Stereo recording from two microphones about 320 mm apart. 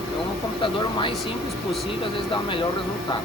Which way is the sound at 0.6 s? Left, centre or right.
Centre.